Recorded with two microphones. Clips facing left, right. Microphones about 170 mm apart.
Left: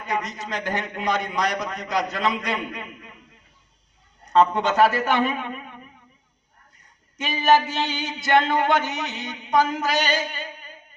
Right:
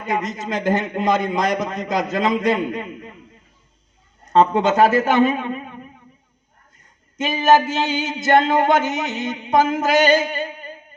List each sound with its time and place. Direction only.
0.0 s a man's voice: 50° right (ahead or behind)
4.3 s a man's voice: 45° right (ahead or behind)
6.7 s a sound: 45° right (ahead or behind)